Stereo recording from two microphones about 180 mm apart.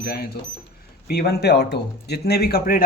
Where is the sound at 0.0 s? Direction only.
60° left (ahead or behind).